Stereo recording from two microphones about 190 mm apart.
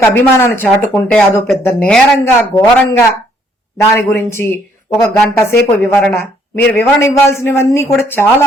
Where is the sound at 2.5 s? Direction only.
15° left (ahead or behind).